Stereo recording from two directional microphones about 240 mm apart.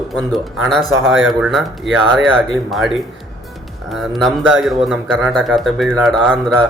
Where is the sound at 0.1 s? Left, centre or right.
Centre.